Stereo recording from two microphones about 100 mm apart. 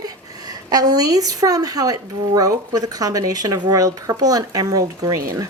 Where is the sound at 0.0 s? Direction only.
40° right (ahead or behind).